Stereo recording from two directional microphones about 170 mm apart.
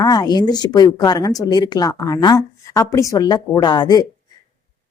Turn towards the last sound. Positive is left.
turn(degrees=25)  # may be behind; listen again after turning